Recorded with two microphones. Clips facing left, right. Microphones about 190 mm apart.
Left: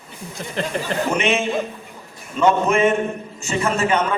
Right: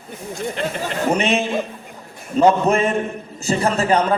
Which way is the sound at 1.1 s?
35° right (ahead or behind).